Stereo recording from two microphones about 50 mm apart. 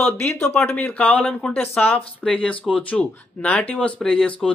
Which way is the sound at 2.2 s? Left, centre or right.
Left.